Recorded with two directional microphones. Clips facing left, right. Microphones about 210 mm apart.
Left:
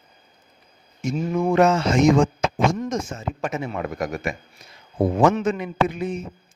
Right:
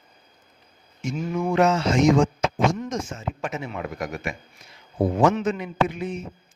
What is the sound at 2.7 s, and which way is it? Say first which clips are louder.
A man's voice: left 3 dB; 45° left (ahead or behind).